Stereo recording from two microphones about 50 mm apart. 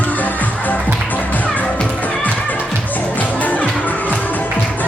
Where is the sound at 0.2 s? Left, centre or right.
Left.